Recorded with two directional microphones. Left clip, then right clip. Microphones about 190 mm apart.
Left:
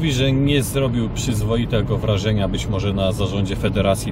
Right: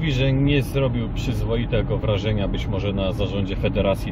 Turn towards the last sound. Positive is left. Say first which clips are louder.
# left 2 dB
turn(degrees=15)  # may be behind; listen again after turning